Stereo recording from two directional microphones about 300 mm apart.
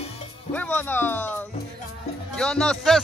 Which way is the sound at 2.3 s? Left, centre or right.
Centre.